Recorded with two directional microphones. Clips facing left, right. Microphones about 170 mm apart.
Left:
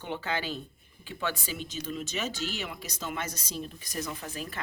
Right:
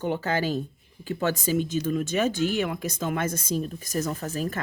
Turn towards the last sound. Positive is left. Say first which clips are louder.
# right 8 dB
turn(degrees=-45)  # may be behind; listen again after turning